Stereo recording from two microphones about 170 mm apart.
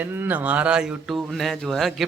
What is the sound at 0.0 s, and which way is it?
Speech, 10° right (ahead or behind).